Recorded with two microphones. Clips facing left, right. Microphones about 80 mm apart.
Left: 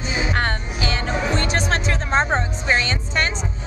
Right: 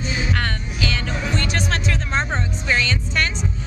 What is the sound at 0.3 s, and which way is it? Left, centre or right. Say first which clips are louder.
Music: left 2 dB; left.